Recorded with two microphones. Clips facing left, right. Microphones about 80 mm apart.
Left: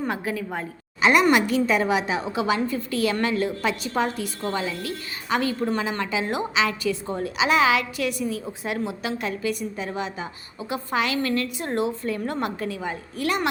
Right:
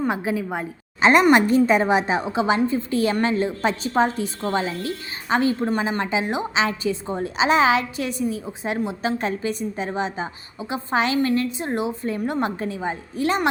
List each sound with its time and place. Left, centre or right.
0.1 s a woman's voice: centre
1.3 s a woman's voice: right